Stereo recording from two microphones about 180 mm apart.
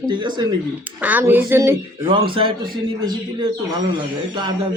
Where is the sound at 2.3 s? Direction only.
30° right (ahead or behind).